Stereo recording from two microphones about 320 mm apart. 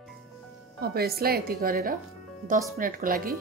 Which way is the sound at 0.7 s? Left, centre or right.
Right.